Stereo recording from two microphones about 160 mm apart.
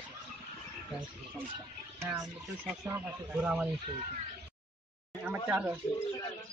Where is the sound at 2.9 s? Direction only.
10° right (ahead or behind).